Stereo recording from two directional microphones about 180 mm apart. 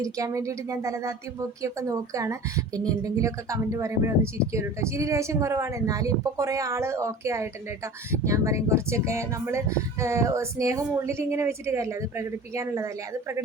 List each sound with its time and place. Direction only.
0.0 s speech: 15° right (ahead or behind)